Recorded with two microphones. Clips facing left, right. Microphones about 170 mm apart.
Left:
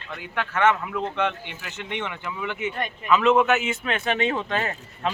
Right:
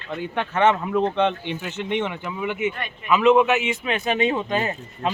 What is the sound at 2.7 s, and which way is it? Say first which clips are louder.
Speech: even; 40° left (ahead or behind).